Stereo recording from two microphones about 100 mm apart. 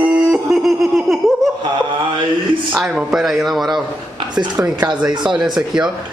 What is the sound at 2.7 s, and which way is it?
Speech, 5° right (ahead or behind).